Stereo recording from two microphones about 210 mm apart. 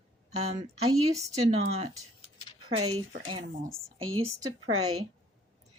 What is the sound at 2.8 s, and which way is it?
Speech, 90° right.